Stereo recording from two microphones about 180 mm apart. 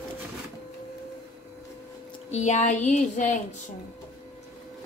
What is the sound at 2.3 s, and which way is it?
A woman's voice, 40° left (ahead or behind).